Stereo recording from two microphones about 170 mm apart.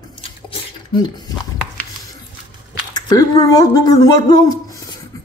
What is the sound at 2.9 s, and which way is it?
Speech, 25° left (ahead or behind).